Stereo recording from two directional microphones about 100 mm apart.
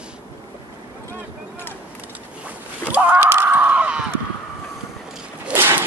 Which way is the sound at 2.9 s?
15° right (ahead or behind).